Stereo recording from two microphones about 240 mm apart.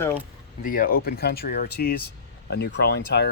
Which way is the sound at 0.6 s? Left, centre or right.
Left.